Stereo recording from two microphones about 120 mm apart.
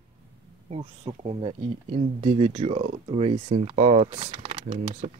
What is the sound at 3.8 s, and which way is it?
Speech, 70° right (ahead or behind).